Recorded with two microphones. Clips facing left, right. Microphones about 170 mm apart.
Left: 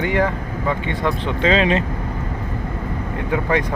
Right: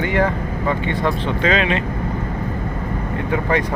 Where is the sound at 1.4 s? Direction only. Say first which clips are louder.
Left 2 dB; 30° left (ahead or behind).